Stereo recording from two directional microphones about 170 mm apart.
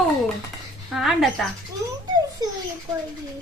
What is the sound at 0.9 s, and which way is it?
Speech, centre (ahead or behind).